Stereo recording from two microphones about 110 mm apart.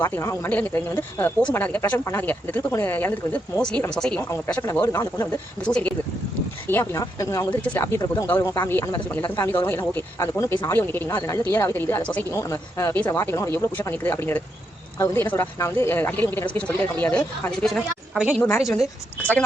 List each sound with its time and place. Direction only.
0.4 s speech: 15° left (ahead or behind)
4.6 s a woman's voice: 25° left (ahead or behind)
5.6 s speech: 10° left (ahead or behind)
6.7 s a woman's voice: 20° left (ahead or behind)
7.6 s a woman's voice: 15° left (ahead or behind)
12.3 s a woman's voice: 25° left (ahead or behind); by 17.7 s 10° left (ahead or behind)
18.1 s a woman's voice: 10° right (ahead or behind)
18.4 s a woman's voice: 25° left (ahead or behind)
19.2 s speech: 15° left (ahead or behind)